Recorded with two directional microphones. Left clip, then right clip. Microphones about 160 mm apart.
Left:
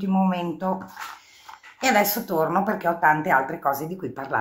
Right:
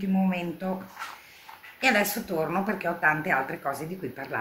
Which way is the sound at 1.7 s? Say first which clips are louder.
Left 3 dB; 15° right (ahead or behind).